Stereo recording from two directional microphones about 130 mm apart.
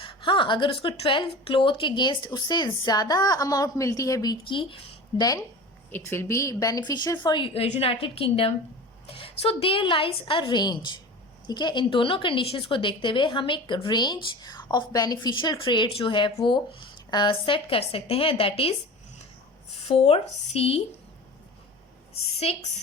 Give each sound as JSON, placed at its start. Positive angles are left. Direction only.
{"t": 0.0, "sound": "a woman's voice", "side_deg": 40}
{"t": 5.2, "sound": "a woman's voice", "side_deg": 30}
{"t": 19.9, "sound": "a woman's voice", "side_deg": 50}
{"t": 22.1, "sound": "a woman's voice", "side_deg": 50}